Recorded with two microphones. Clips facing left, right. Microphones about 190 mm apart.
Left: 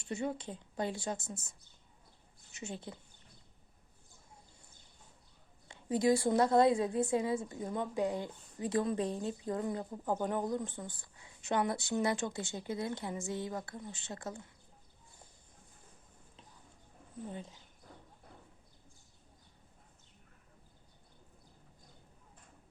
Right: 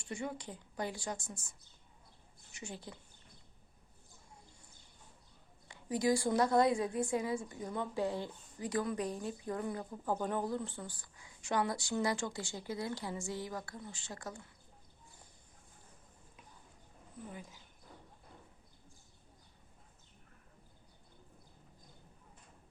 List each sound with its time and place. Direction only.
0.0 s a woman's voice: 25° left (ahead or behind)
5.6 s a woman's voice: 25° left (ahead or behind)
17.2 s a woman's voice: 25° left (ahead or behind)